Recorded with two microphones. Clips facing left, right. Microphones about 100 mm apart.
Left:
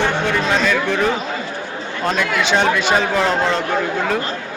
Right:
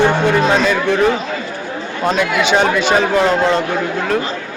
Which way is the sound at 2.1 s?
5° right (ahead or behind).